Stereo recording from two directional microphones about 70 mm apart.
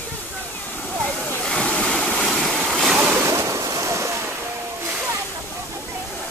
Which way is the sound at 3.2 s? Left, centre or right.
Right.